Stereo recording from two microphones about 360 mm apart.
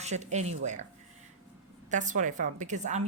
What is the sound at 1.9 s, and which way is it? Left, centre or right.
Speech, right.